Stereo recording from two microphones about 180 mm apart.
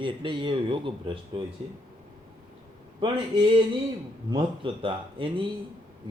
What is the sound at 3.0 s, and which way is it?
Speech, 25° right (ahead or behind).